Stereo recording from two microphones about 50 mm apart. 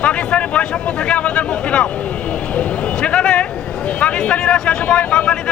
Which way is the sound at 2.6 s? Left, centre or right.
Left.